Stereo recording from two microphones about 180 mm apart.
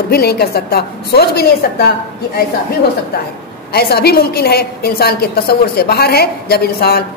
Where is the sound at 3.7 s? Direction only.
60° left (ahead or behind).